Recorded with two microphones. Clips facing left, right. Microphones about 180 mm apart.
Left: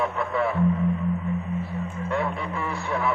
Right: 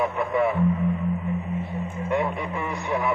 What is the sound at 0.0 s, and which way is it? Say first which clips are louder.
Speech: right 2 dB; 20° right (ahead or behind).